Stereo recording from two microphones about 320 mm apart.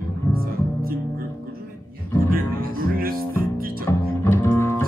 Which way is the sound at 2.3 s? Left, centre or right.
Right.